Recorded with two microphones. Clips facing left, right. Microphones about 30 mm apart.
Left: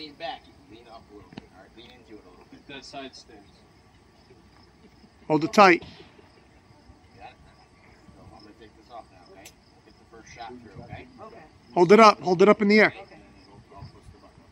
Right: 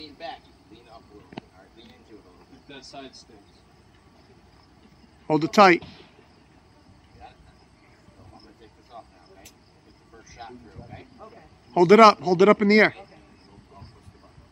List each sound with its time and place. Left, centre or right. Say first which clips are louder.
0.0 s speech: left 2 dB; centre
1.6 s a sound: left 1 dB; centre
3.0 s speech: left 2 dB; left
5.2 s speech: right 1 dB; centre
8.2 s vehicle: left 1 dB; centre
10.6 s speech: left 1 dB; centre
11.1 s speech: left 1 dB; centre
11.7 s speech: right 1 dB; centre
12.9 s a sound: left 1 dB; centre